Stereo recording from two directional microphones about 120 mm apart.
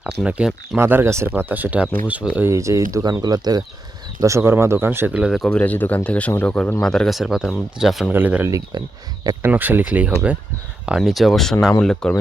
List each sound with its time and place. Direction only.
0.0 s speech: 10° right (ahead or behind)
0.8 s speech: 20° right (ahead or behind)
2.5 s speech: 25° right (ahead or behind)
4.2 s speech: 25° right (ahead or behind); by 5.5 s 5° right (ahead or behind)
5.5 s speech: 10° left (ahead or behind)
8.1 s speech: 15° right (ahead or behind)
8.4 s speech: 25° right (ahead or behind)
9.5 s speech: 15° right (ahead or behind); by 12.1 s 5° left (ahead or behind)